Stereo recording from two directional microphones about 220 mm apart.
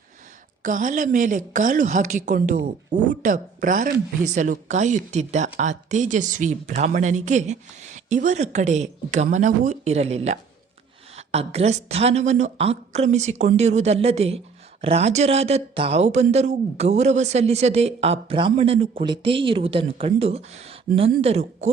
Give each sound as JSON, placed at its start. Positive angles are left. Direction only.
{"t": 0.6, "sound": "a woman's voice", "side_deg": -35}